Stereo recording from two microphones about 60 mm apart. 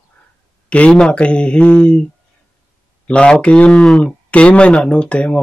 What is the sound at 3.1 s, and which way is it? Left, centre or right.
Speech, centre.